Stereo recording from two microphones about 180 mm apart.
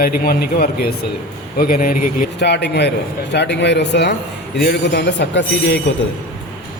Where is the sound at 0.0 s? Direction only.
55° left (ahead or behind).